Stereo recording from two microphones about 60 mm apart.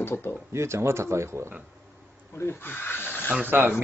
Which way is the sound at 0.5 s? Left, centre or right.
Right.